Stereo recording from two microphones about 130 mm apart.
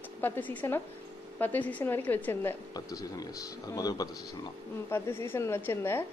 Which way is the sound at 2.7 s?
30° left (ahead or behind).